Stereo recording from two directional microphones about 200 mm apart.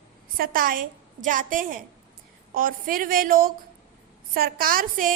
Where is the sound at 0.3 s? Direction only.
45° right (ahead or behind).